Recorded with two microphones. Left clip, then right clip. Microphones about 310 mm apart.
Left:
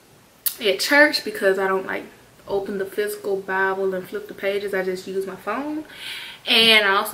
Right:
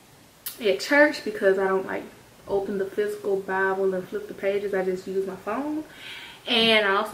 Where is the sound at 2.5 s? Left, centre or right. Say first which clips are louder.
Left 1 dB; centre.